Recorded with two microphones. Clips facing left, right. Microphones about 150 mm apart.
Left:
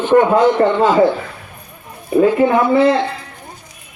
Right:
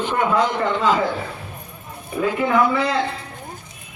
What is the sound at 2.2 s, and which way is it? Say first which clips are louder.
Speech: left 4 dB; 30° left (ahead or behind).